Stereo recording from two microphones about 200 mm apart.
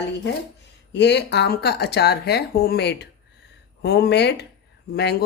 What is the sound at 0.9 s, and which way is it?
Speech, 60° left (ahead or behind).